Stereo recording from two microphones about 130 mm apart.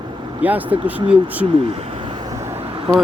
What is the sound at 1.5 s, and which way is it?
Speech, 45° right (ahead or behind).